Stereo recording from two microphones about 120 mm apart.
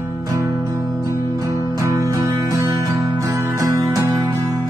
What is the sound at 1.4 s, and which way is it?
Music, 30° right (ahead or behind).